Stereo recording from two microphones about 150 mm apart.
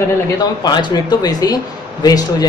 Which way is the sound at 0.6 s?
30° left (ahead or behind).